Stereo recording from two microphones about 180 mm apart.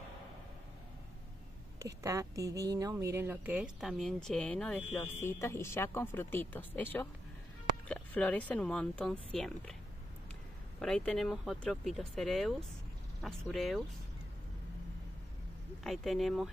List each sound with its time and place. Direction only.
2.0 s speech: 15° right (ahead or behind); by 9.8 s 5° left (ahead or behind)
10.8 s speech: 5° left (ahead or behind)
15.8 s speech: centre (ahead or behind)